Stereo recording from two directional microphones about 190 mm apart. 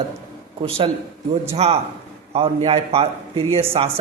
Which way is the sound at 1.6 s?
35° right (ahead or behind).